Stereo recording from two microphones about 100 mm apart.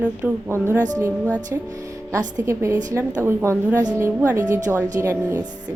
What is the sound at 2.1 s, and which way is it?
A woman's voice, 25° right (ahead or behind).